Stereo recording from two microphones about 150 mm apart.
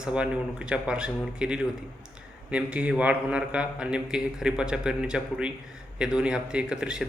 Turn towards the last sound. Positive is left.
turn(degrees=-5)  # may be behind; listen again after turning